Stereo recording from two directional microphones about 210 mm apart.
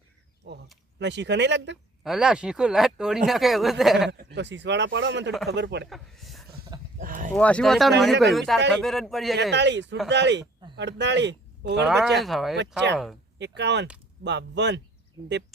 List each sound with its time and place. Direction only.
0.9 s speech: 55° right (ahead or behind)
2.0 s speech: 5° right (ahead or behind)
4.2 s speech: 55° right (ahead or behind)
5.9 s speech: centre (ahead or behind)
7.0 s a sound: 40° right (ahead or behind)
7.3 s speech: 5° left (ahead or behind)
9.3 s speech: 55° right (ahead or behind)
12.2 s speech: centre (ahead or behind)
13.4 s speech: 55° right (ahead or behind)